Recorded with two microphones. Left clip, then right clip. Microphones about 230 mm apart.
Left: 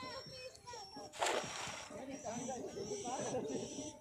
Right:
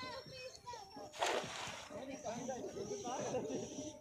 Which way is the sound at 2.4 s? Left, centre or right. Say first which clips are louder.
Even; right.